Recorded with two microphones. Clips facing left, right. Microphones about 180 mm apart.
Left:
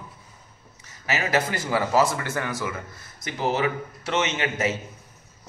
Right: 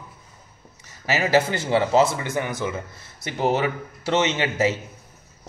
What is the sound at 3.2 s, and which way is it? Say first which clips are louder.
A man's voice: right 2 dB; 30° right (ahead or behind).